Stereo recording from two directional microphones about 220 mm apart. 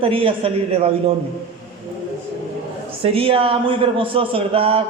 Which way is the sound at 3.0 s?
25° right (ahead or behind).